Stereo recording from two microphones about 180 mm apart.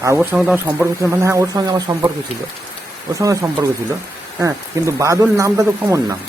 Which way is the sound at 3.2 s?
20° right (ahead or behind).